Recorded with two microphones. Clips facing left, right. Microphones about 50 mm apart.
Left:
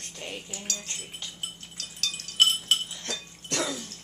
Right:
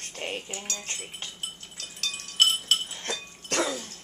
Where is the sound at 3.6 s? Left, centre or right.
Centre.